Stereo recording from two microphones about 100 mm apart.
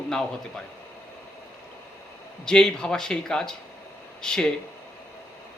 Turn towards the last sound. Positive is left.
turn(degrees=10)  # may be behind; listen again after turning